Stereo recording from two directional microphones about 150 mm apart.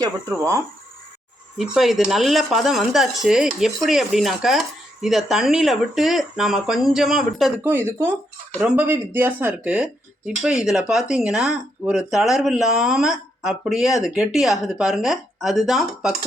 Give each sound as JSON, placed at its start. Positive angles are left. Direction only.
{"t": 0.0, "sound": "speech", "side_deg": -20}
{"t": 1.5, "sound": "speech", "side_deg": -5}
{"t": 7.6, "sound": "speech", "side_deg": -15}